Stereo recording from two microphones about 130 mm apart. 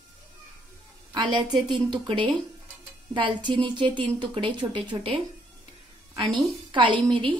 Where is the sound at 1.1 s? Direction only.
35° right (ahead or behind).